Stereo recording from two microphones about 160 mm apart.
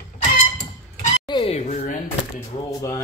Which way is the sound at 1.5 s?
45° left (ahead or behind).